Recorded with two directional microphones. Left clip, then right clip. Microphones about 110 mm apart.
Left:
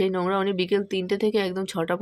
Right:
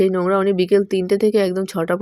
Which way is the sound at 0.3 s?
35° right (ahead or behind).